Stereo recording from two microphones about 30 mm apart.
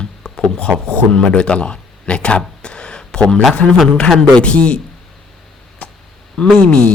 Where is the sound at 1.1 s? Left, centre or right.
Left.